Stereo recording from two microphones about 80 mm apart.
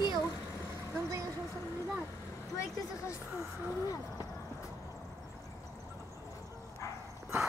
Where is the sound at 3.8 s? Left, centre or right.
Left.